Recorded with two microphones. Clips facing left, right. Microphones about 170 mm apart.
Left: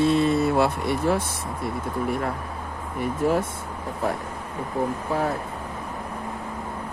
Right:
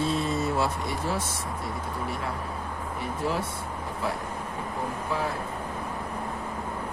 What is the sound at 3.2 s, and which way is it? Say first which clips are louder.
Speech: left 7 dB; 50° left (ahead or behind).